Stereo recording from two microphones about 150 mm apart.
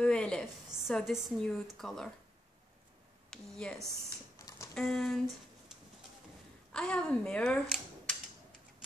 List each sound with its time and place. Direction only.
0.0 s a woman's voice: 5° left (ahead or behind)
3.3 s speech: 5° left (ahead or behind)
4.4 s a sound: 20° left (ahead or behind)
4.7 s a woman's voice: 5° left (ahead or behind)
6.7 s speech: 5° left (ahead or behind)
7.6 s a sound: centre (ahead or behind)